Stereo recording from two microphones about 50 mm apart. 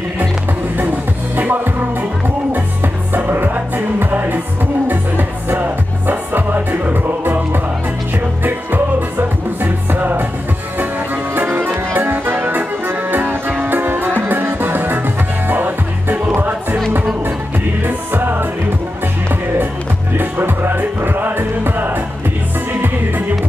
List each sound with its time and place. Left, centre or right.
1.3 s music: right
9.6 s music: right
11.3 s music: right
17.8 s music: right
20.2 s music: right